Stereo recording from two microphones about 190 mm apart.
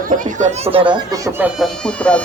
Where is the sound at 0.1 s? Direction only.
40° right (ahead or behind).